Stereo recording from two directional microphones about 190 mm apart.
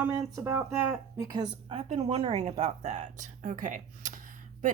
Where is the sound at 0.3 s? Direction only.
15° right (ahead or behind).